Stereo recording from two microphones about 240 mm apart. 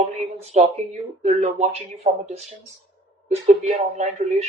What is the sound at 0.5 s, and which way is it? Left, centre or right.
Speech, right.